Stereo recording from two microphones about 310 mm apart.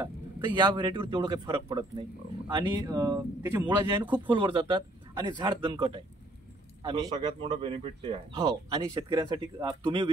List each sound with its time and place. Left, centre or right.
0.0 s a man's voice: centre